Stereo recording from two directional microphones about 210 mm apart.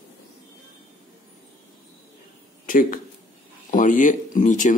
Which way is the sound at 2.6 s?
40° left (ahead or behind).